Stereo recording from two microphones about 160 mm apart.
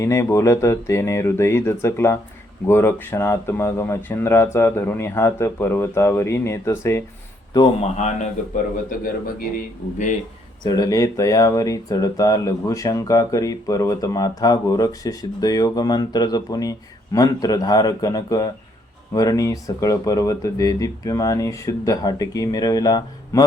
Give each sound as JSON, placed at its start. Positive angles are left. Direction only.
{"t": 0.0, "sound": "speech", "side_deg": 15}
{"t": 7.8, "sound": "speech", "side_deg": 45}
{"t": 9.6, "sound": "speech", "side_deg": 55}
{"t": 10.6, "sound": "speech", "side_deg": 25}